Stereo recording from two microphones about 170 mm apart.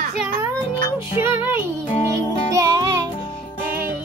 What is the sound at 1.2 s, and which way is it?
Music, 15° right (ahead or behind).